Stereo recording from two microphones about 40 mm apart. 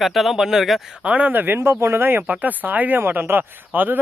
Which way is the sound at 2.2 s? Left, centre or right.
Right.